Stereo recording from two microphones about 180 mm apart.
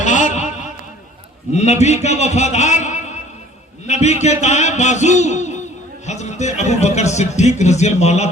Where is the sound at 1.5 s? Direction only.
40° left (ahead or behind).